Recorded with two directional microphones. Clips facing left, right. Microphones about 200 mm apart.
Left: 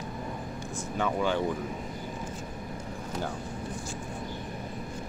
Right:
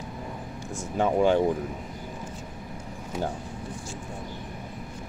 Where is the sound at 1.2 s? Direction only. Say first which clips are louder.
Right 8 dB; 45° right (ahead or behind).